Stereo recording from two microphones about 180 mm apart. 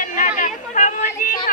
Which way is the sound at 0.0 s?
45° left (ahead or behind).